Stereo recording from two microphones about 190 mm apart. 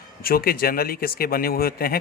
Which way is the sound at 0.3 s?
50° left (ahead or behind).